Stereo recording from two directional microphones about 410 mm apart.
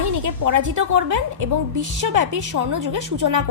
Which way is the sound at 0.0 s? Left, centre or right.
Right.